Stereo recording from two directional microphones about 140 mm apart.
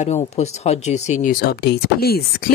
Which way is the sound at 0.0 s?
55° left (ahead or behind).